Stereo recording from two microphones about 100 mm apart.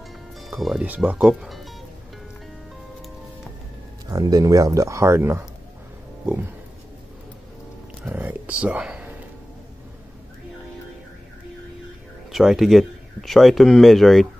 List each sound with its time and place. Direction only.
0.4 s speech: centre (ahead or behind)
0.8 s speech: 15° right (ahead or behind)
1.2 s speech: centre (ahead or behind)
4.1 s speech: 40° right (ahead or behind)
8.2 s a sound: 10° right (ahead or behind)
12.3 s speech: centre (ahead or behind)